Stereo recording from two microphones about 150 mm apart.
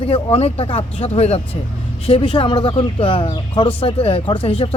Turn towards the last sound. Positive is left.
turn(degrees=35)  # may be behind; listen again after turning